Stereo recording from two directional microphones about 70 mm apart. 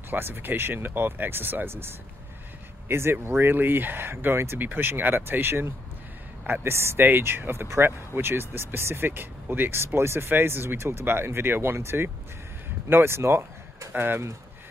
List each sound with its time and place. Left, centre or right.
0.1 s speech: right